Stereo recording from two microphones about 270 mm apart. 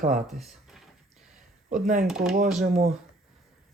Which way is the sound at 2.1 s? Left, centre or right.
Centre.